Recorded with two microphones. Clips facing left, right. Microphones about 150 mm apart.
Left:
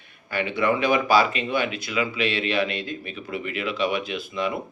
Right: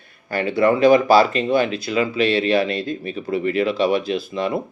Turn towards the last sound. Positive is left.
turn(degrees=-35)  # may be behind; listen again after turning